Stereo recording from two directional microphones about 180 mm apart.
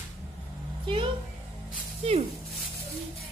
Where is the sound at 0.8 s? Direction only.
30° right (ahead or behind).